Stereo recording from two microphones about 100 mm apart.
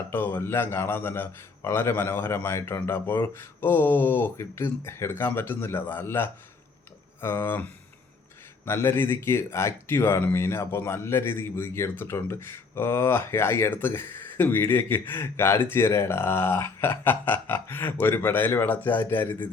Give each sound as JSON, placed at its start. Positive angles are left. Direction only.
{"t": 0.1, "sound": "speech", "side_deg": 20}